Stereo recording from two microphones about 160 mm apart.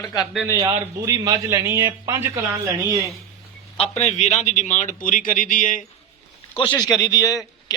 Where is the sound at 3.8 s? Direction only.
40° left (ahead or behind).